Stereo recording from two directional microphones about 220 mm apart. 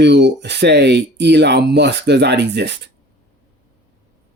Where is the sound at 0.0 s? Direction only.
50° right (ahead or behind).